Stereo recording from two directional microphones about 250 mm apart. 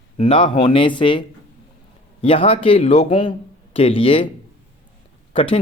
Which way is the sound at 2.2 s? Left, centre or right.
Left.